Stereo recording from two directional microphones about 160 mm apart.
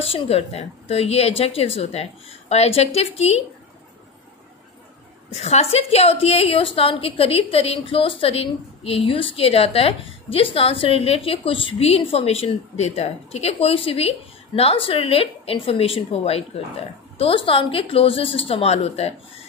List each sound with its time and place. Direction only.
0.0 s a woman's voice: 40° left (ahead or behind)
5.3 s a woman's voice: 40° left (ahead or behind)